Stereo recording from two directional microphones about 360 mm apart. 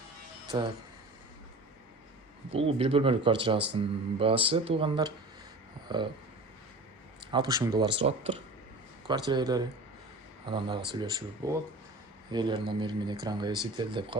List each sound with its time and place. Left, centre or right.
0.5 s speech: centre
2.5 s speech: centre
7.3 s speech: centre